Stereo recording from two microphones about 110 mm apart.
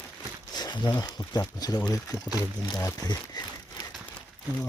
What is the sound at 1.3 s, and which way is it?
Speech, 35° left (ahead or behind).